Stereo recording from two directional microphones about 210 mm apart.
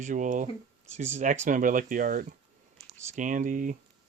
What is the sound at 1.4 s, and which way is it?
Speech, 40° right (ahead or behind).